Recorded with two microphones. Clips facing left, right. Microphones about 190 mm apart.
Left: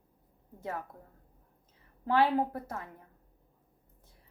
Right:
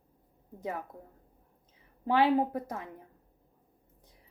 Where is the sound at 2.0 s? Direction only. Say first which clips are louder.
Right 2 dB; 15° right (ahead or behind).